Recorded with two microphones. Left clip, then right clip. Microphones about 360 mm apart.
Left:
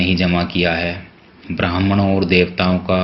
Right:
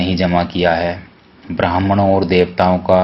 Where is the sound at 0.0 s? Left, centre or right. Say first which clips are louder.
Right 2 dB; right.